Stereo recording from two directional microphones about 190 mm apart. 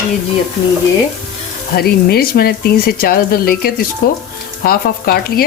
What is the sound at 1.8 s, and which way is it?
Stir, 55° left (ahead or behind).